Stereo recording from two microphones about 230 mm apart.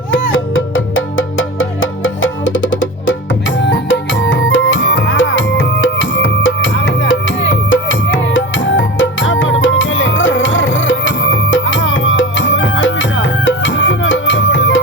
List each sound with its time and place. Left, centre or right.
0.1 s music: left